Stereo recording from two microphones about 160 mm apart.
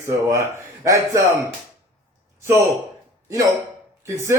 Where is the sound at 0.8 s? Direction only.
20° right (ahead or behind).